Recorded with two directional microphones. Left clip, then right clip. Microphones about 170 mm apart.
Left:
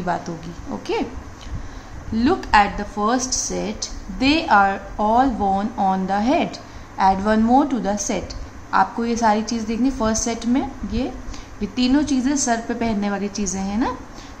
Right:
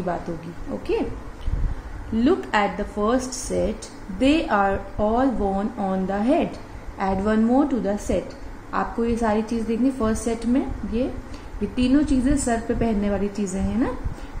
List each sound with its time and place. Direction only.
2.1 s a woman's voice: 10° left (ahead or behind)